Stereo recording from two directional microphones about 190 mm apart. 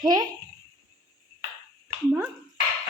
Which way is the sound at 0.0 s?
20° right (ahead or behind).